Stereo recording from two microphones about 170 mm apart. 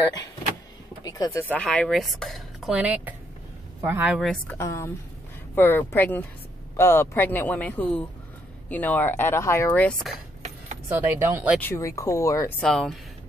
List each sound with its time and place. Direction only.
1.0 s speech: 20° left (ahead or behind)
1.5 s speech: 5° left (ahead or behind)
4.6 s speech: 15° left (ahead or behind)
10.9 s speech: 15° right (ahead or behind)
11.6 s speech: 15° left (ahead or behind)
12.5 s speech: 5° left (ahead or behind)